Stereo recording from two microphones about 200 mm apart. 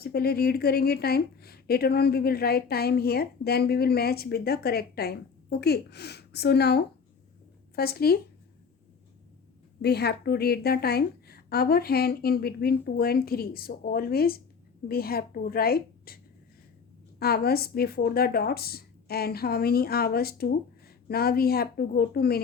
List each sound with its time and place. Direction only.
0.0 s a woman's voice: 50° left (ahead or behind)
9.8 s a woman's voice: 55° left (ahead or behind)